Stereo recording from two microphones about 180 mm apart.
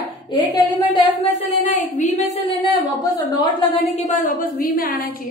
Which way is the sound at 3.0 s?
25° left (ahead or behind).